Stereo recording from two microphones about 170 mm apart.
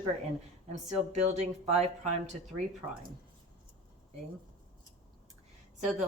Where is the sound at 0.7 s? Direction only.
45° right (ahead or behind).